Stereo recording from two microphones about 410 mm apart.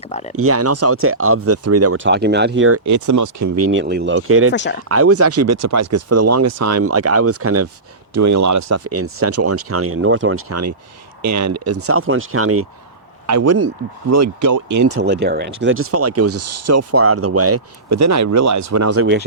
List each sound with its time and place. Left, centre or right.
0.1 s speech: centre
0.3 s speech: right
4.5 s speech: left
4.9 s speech: right
14.9 s speech: right